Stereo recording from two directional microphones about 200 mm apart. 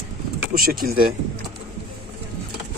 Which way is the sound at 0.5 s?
45° right (ahead or behind).